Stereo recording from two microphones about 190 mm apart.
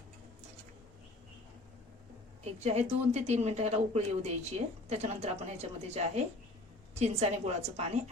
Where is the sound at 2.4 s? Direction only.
35° right (ahead or behind).